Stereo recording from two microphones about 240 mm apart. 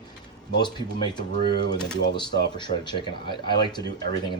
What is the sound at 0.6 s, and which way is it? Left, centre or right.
Speech, centre.